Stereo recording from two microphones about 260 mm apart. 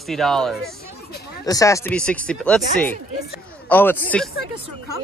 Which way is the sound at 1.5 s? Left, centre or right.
Centre.